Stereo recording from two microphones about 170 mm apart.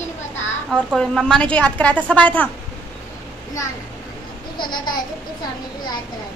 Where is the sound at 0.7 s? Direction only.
Centre (ahead or behind).